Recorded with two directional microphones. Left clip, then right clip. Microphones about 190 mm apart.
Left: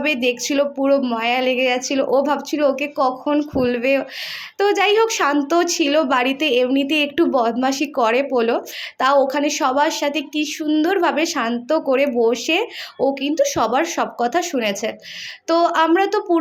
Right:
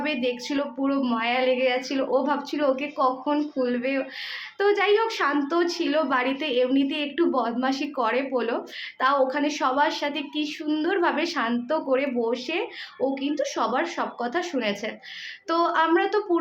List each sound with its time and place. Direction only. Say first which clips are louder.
0.0 s a woman's voice: left 7 dB; 35° left (ahead or behind)